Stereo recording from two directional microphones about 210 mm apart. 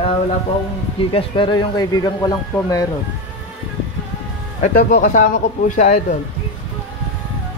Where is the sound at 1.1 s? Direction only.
25° left (ahead or behind).